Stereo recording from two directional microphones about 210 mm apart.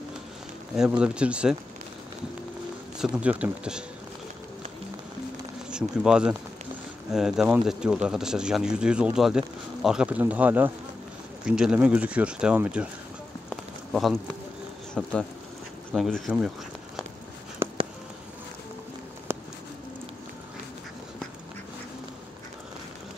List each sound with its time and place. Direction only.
0.7 s speech: 5° right (ahead or behind)
3.0 s speech: 5° right (ahead or behind)
5.7 s speech: 5° right (ahead or behind)
13.5 s a sound: centre (ahead or behind)
15.0 s speech: centre (ahead or behind)
19.3 s a sound: 10° right (ahead or behind)